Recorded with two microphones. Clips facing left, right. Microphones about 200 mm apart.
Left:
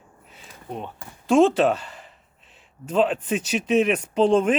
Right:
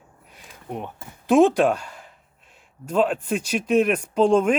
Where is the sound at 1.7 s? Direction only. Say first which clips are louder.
Even; 10° right (ahead or behind).